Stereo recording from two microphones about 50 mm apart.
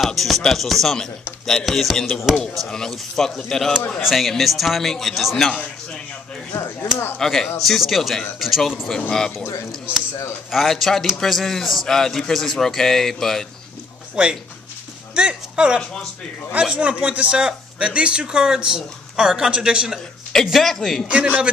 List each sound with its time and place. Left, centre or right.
0.0 s a man's voice: centre
1.7 s a man's voice: centre
6.8 s speech: left
7.2 s a man's voice: centre
10.5 s a man's voice: centre
14.2 s speech: centre
15.8 s a man's voice: centre
16.5 s speech: right
20.6 s a man's voice: centre
21.1 s speech: right